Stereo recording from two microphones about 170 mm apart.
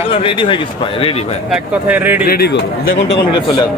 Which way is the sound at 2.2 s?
70° left (ahead or behind).